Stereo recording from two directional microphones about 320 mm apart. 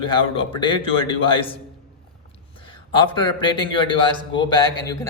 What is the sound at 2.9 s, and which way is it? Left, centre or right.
A man's voice, centre.